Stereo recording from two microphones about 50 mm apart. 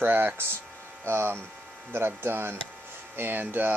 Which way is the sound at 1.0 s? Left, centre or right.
Right.